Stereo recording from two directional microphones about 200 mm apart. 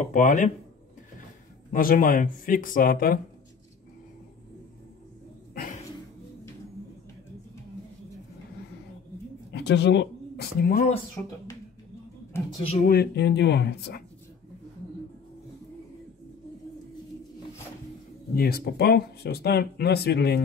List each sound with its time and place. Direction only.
0.0 s speech: 40° left (ahead or behind)
1.7 s speech: 45° left (ahead or behind)
9.5 s speech: 60° left (ahead or behind)
11.2 s a woman's voice: 10° left (ahead or behind)
12.5 s speech: 30° left (ahead or behind)
12.8 s speech: 50° left (ahead or behind)
18.3 s speech: 50° left (ahead or behind)